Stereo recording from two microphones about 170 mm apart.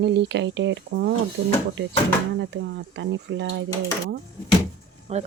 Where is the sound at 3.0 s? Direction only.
90° right.